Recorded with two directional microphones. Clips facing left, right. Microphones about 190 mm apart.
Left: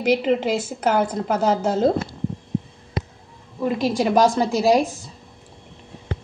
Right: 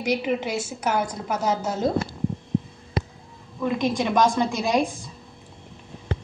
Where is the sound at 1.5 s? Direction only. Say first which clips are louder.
Left 3 dB; 30° left (ahead or behind).